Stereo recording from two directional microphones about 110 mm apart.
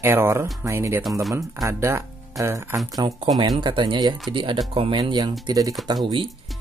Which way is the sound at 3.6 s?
45° right (ahead or behind).